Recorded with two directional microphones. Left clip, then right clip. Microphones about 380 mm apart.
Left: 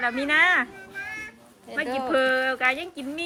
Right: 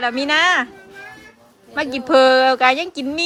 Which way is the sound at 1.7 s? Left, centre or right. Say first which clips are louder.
Right 9 dB; centre.